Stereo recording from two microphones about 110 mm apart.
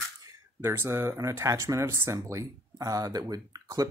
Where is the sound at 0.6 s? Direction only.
20° right (ahead or behind).